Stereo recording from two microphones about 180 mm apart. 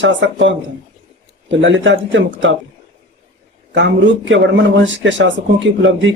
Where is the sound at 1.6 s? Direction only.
90° right.